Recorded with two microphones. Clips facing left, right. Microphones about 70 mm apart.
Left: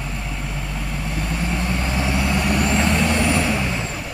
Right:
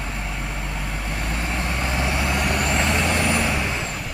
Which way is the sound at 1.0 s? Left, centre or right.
Centre.